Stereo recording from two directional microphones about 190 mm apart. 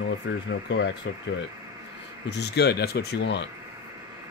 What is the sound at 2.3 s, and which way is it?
Speech, 60° left (ahead or behind).